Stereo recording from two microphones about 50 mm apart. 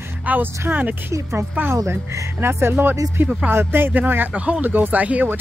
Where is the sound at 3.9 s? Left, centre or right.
Right.